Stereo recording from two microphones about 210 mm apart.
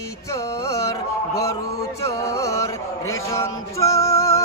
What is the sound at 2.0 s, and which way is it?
Music, 15° left (ahead or behind).